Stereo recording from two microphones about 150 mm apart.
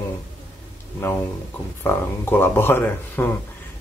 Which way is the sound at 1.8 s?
15° left (ahead or behind).